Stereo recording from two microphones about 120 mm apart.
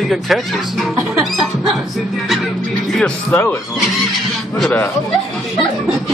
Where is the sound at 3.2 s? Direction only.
15° left (ahead or behind).